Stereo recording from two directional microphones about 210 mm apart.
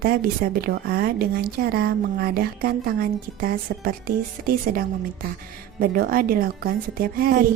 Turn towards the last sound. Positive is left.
turn(degrees=-45)  # may be behind; listen again after turning